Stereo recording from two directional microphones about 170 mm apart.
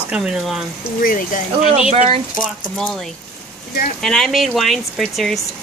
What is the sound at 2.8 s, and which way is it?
Speech, 5° left (ahead or behind).